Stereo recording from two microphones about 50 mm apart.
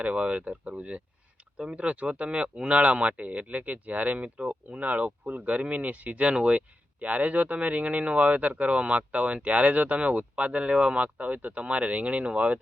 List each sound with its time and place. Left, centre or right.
0.0 s speech: right